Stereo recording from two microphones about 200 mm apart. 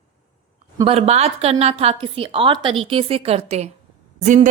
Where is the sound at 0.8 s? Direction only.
30° right (ahead or behind).